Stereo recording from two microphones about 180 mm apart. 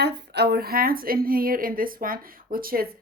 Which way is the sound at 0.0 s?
65° right (ahead or behind).